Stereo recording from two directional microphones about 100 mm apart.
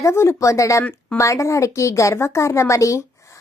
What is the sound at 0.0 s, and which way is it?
A woman's voice, 30° left (ahead or behind).